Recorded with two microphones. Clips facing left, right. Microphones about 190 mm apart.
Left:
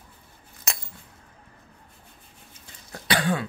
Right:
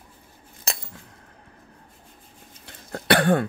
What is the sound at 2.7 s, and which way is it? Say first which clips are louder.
Cough: right 7 dB; 60° right (ahead or behind).